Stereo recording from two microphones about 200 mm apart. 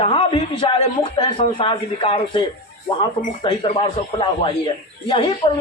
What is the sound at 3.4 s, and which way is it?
Speech, 25° left (ahead or behind).